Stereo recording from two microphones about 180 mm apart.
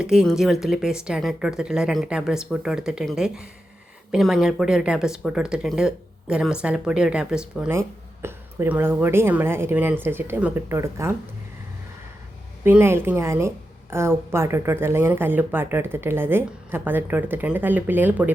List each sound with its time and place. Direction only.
0.0 s speech: 5° right (ahead or behind)
7.8 s speech: 15° right (ahead or behind)
12.6 s speech: 15° right (ahead or behind)